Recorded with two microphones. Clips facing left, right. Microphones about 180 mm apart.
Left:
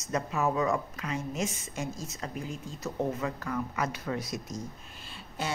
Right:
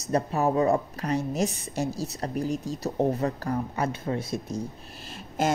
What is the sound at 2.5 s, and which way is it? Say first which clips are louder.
Speech: right 10 dB; 75° right (ahead or behind).